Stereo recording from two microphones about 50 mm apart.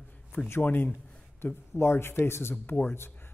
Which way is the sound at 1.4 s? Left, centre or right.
Left.